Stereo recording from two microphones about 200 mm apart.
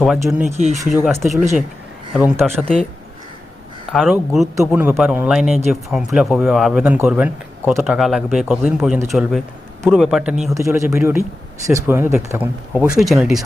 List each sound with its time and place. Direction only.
0.0 s speech: centre (ahead or behind)
0.5 s speech: 35° right (ahead or behind)
0.9 s speech: centre (ahead or behind)
3.9 s speech: centre (ahead or behind)
10.5 s speech: 15° right (ahead or behind)